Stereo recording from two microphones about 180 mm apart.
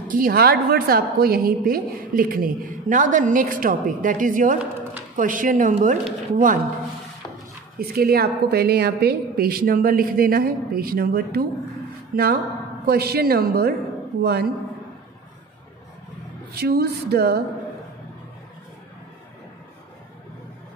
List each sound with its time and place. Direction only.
0.1 s a woman's voice: 55° right (ahead or behind)
7.9 s a woman's voice: 55° right (ahead or behind)
16.5 s a woman's voice: 60° right (ahead or behind)